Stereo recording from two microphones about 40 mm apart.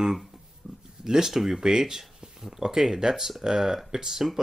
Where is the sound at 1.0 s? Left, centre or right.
Centre.